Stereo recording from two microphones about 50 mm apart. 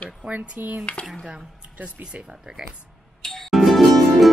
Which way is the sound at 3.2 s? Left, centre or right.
Centre.